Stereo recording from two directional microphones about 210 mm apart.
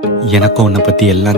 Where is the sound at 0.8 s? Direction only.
Centre (ahead or behind).